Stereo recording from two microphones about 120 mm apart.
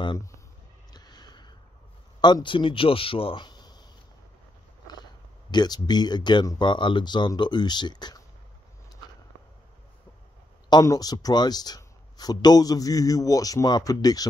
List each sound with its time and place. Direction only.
0.9 s a sound: 35° left (ahead or behind)
2.2 s speech: 40° left (ahead or behind)
5.5 s speech: 35° left (ahead or behind)
10.7 s speech: 30° left (ahead or behind)